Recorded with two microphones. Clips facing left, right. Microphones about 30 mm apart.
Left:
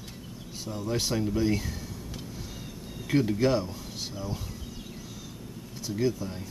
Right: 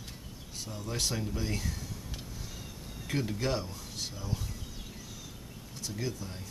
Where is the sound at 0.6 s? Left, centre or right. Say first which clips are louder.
Left 5 dB; centre.